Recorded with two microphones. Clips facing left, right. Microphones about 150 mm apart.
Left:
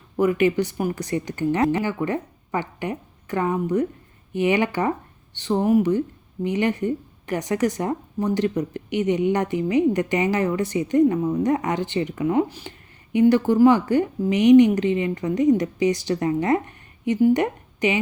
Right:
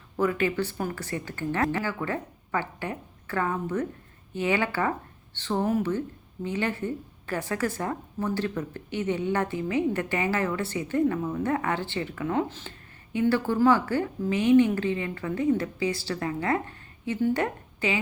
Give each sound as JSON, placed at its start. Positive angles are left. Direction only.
{"t": 0.2, "sound": "speech", "side_deg": 15}